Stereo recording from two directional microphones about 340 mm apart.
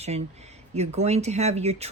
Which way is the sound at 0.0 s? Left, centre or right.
Centre.